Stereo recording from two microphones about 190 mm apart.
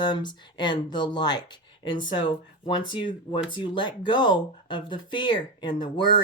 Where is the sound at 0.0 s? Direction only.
25° left (ahead or behind).